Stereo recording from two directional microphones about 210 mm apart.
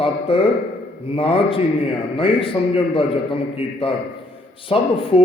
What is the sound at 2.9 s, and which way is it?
A man's voice, 25° left (ahead or behind).